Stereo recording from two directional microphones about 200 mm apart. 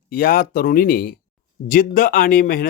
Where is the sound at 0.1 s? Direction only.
45° left (ahead or behind).